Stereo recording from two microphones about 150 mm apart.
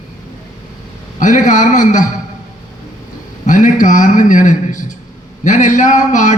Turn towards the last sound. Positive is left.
turn(degrees=55)  # may be behind; listen again after turning